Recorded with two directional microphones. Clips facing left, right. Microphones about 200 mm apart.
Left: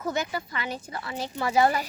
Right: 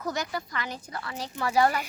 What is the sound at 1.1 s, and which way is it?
Speech, 25° left (ahead or behind).